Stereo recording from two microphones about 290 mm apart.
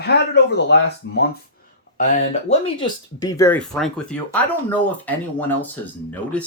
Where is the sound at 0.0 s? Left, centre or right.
Left.